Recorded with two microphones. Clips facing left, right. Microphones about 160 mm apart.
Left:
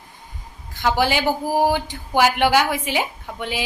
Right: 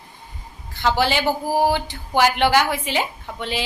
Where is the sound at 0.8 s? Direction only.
10° left (ahead or behind).